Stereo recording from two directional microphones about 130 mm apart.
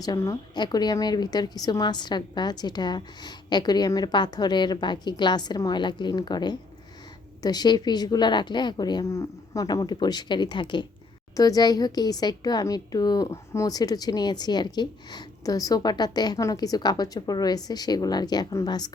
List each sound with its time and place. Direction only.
0.0 s speech: 25° left (ahead or behind)